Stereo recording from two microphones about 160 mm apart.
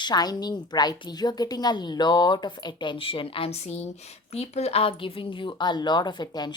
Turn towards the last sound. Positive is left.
turn(degrees=25)  # may be behind; listen again after turning